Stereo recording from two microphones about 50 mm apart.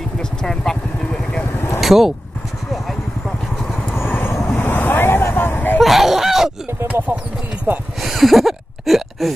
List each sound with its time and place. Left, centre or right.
0.2 s vehicle: centre
1.4 s vehicle: left
1.8 s vehicle: centre
4.0 s vehicle: left
4.6 s waves: left
5.3 s a sound: left
5.8 s honk: centre
6.9 s speech: right
8.0 s a sound: centre